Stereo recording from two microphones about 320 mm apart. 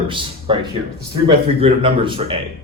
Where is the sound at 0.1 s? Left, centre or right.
Centre.